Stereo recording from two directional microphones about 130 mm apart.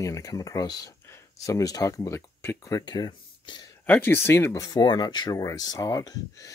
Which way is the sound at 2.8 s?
35° left (ahead or behind).